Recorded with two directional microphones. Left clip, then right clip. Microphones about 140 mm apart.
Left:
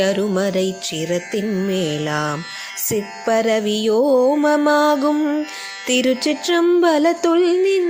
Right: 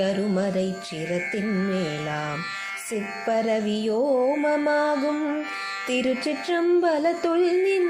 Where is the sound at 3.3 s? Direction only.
50° left (ahead or behind).